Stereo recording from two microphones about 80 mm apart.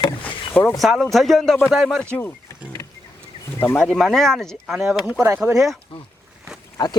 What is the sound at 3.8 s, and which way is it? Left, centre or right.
A man's voice, centre.